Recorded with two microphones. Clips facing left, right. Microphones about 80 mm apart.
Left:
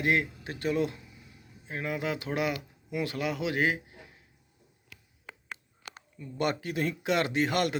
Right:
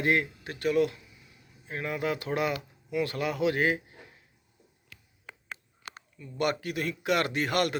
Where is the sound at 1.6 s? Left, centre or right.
Centre.